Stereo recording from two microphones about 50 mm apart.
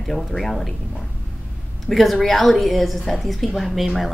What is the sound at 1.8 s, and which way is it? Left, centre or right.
A woman's voice, centre.